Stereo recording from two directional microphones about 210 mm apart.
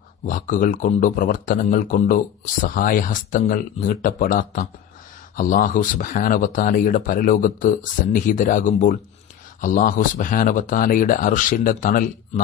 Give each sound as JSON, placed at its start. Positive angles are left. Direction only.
{"t": 0.3, "sound": "speech", "side_deg": 40}